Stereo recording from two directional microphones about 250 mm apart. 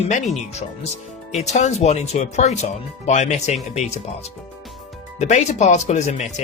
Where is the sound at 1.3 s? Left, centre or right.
Left.